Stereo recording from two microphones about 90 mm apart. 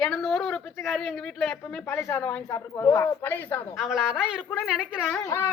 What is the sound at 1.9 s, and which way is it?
Speech, 25° left (ahead or behind).